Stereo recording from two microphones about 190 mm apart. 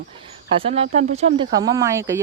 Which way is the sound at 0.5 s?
30° right (ahead or behind).